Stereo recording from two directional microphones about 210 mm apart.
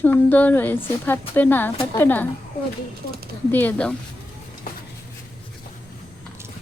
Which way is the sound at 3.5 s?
10° left (ahead or behind).